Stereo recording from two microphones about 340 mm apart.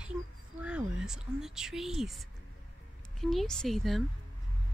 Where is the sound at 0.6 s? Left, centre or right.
Centre.